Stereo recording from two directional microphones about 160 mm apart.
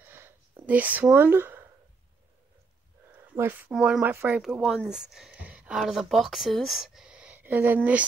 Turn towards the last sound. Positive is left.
turn(degrees=-10)  # may be behind; listen again after turning